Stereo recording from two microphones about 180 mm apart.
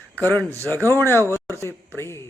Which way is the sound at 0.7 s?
15° right (ahead or behind).